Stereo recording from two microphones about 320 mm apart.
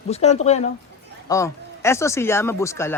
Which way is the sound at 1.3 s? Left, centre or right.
Centre.